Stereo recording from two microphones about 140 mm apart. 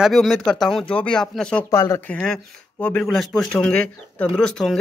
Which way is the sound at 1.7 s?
20° left (ahead or behind).